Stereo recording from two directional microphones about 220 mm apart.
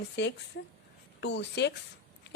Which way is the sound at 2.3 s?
50° left (ahead or behind).